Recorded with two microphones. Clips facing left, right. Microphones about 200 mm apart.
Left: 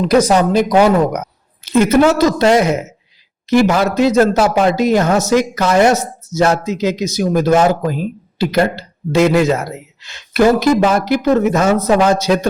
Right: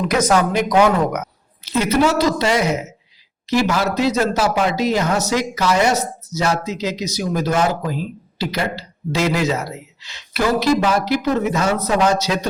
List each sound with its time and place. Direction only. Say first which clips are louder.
0.0 s a man's voice: left 5 dB; 30° left (ahead or behind)
1.7 s speech: left 6 dB; 50° left (ahead or behind)